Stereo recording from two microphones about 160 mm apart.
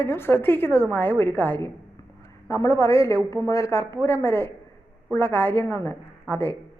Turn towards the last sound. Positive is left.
turn(degrees=15)  # may be behind; listen again after turning